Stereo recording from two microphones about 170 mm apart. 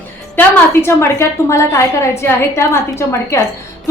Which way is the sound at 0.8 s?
15° left (ahead or behind).